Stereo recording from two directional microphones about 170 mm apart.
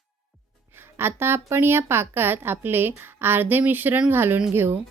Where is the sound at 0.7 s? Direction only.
15° right (ahead or behind).